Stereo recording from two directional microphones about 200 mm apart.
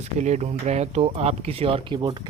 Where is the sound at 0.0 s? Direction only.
35° right (ahead or behind).